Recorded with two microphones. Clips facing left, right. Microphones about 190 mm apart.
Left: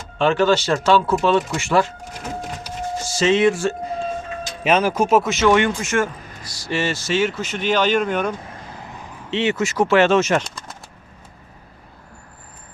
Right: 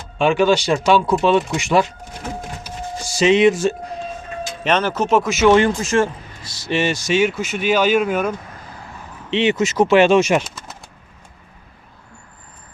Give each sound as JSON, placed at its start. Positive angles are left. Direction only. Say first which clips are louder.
{"t": 0.2, "sound": "speech", "louder": "right 1 dB", "side_deg": -10}
{"t": 3.0, "sound": "speech", "louder": "right 3 dB", "side_deg": -15}
{"t": 4.6, "sound": "speech", "louder": "left 1 dB", "side_deg": 10}
{"t": 5.5, "sound": "speech", "louder": "right 5 dB", "side_deg": -35}
{"t": 9.3, "sound": "speech", "louder": "right 3 dB", "side_deg": -15}